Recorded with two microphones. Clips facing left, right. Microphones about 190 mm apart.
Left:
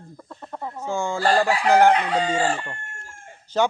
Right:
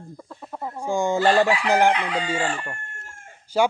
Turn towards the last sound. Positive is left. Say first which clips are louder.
# right 1 dB
turn(degrees=-10)  # may be behind; listen again after turning